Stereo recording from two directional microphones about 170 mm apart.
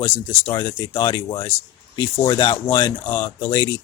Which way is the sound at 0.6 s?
25° left (ahead or behind).